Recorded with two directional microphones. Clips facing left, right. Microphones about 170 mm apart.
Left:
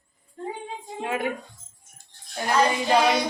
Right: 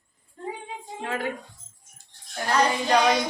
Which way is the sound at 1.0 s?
15° left (ahead or behind).